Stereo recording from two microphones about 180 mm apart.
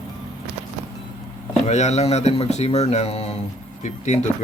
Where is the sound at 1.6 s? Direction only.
40° left (ahead or behind).